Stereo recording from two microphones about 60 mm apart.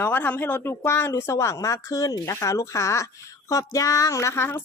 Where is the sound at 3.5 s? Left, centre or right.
Left.